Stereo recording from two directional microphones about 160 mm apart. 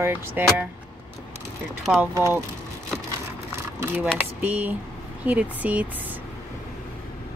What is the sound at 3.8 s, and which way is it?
Speech, 10° right (ahead or behind).